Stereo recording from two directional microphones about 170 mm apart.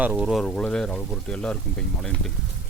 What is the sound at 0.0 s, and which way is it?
Speech, 5° right (ahead or behind).